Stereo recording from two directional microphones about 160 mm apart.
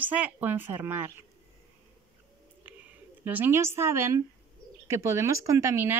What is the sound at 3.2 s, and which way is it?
Speech, 10° right (ahead or behind).